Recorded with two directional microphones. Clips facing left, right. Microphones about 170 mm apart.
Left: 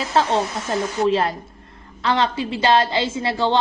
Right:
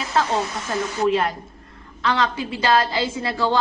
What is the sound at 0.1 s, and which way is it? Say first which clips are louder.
A woman's voice: left 2 dB; 30° left (ahead or behind).